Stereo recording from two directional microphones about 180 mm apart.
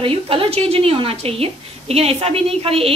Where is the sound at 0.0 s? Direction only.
30° right (ahead or behind).